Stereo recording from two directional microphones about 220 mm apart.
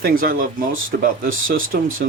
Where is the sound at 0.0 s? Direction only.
40° right (ahead or behind).